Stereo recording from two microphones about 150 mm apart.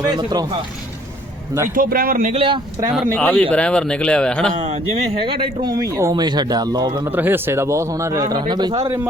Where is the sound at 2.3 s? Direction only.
35° right (ahead or behind).